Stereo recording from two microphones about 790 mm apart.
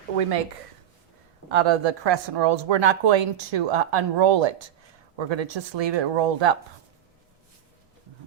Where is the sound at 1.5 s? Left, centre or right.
Right.